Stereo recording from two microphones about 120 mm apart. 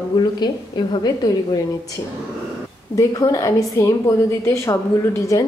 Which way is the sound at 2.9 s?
30° left (ahead or behind).